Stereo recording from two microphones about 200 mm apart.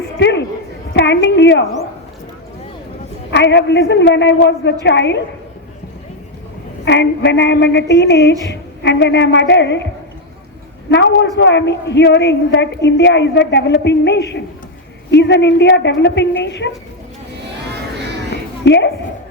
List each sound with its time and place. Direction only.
0.2 s a sound: 60° left (ahead or behind)
0.9 s a woman's voice: 60° left (ahead or behind)
3.3 s a woman's voice: 60° left (ahead or behind)
6.8 s a woman's voice: 60° left (ahead or behind)
10.9 s a woman's voice: 60° left (ahead or behind)
18.6 s speech: 60° left (ahead or behind)